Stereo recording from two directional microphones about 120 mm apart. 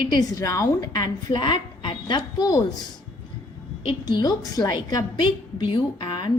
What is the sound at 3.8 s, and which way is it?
A woman's voice, 35° left (ahead or behind).